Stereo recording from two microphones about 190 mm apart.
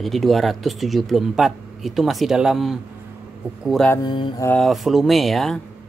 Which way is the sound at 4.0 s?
25° left (ahead or behind).